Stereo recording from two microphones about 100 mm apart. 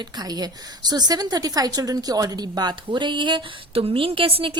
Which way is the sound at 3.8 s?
70° right (ahead or behind).